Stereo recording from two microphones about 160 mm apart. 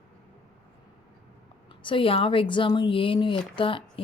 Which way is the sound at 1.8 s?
35° left (ahead or behind).